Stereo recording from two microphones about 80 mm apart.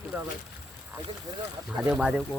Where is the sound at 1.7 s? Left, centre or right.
Centre.